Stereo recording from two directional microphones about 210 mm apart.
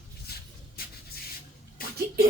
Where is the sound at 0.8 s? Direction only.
45° left (ahead or behind).